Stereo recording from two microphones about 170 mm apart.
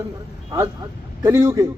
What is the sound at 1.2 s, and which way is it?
Speech, 20° right (ahead or behind).